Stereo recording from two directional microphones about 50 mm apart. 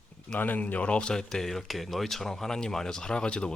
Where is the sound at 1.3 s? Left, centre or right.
Centre.